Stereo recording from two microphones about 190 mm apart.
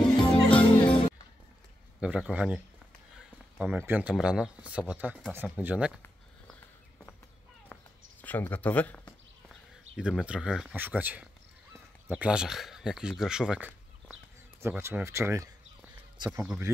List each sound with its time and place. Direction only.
0.0 s music: 5° left (ahead or behind)
2.0 s speech: 5° right (ahead or behind)
7.7 s a sound: 10° left (ahead or behind)
9.9 s speech: 5° right (ahead or behind)